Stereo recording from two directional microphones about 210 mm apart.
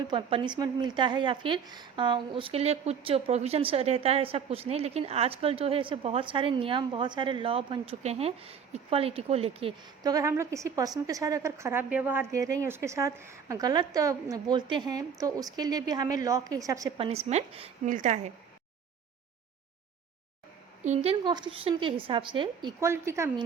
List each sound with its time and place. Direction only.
0.1 s speech: 25° right (ahead or behind)
17.1 s a woman's voice: 30° right (ahead or behind)
20.8 s speech: 30° right (ahead or behind)
22.8 s speech: 15° right (ahead or behind)